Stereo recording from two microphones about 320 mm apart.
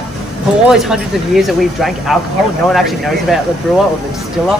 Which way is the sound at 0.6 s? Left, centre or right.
Centre.